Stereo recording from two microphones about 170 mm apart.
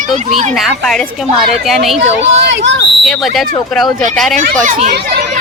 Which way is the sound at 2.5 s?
90° right.